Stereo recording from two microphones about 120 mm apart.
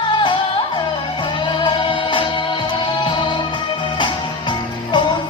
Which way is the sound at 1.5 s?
40° left (ahead or behind).